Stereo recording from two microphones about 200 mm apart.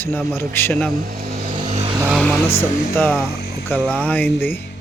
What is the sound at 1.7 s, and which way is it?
Vehicle, 30° right (ahead or behind).